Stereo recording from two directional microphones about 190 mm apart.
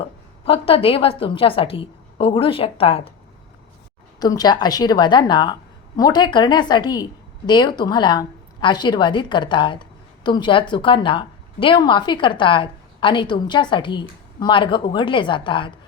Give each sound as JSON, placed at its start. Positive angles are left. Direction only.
{"t": 0.0, "sound": "a woman's voice", "side_deg": 30}
{"t": 4.2, "sound": "a woman's voice", "side_deg": 20}